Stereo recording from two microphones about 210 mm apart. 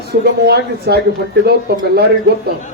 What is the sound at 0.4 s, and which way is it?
Speech, 50° right (ahead or behind).